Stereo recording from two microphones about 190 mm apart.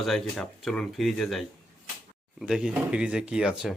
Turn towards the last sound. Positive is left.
turn(degrees=-5)  # may be behind; listen again after turning